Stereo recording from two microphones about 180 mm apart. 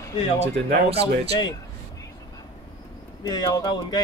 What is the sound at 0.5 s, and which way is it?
Speech, 70° right (ahead or behind).